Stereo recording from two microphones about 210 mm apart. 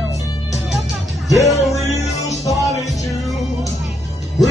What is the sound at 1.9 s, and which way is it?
Music, 30° left (ahead or behind).